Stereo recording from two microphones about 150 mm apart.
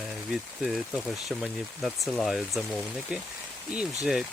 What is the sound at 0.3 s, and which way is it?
Speech, centre (ahead or behind).